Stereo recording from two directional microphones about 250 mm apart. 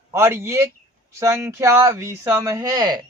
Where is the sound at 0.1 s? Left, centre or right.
Centre.